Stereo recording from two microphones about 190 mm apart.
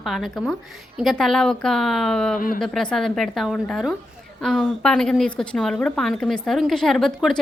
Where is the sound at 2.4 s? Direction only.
45° left (ahead or behind).